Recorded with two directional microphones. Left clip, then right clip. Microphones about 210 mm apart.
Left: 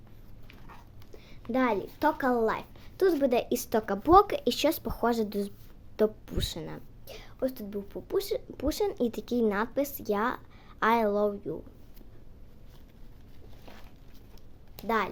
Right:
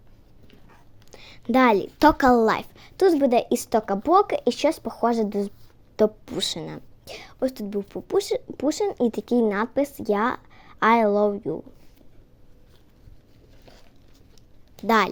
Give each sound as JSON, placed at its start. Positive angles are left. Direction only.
{"t": 1.1, "sound": "a woman's voice", "side_deg": -50}
{"t": 3.0, "sound": "a woman's voice", "side_deg": -25}
{"t": 14.8, "sound": "speech", "side_deg": -45}